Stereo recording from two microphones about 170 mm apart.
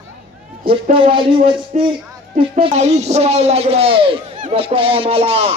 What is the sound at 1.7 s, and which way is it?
Speech, 45° right (ahead or behind).